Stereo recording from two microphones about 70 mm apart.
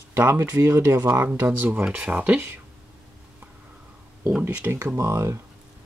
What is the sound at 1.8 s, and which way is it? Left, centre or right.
Speech, centre.